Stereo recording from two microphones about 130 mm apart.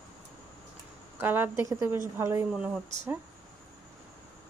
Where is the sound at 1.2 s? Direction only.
15° right (ahead or behind).